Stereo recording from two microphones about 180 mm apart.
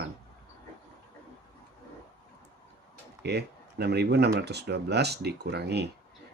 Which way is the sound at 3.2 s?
65° right (ahead or behind).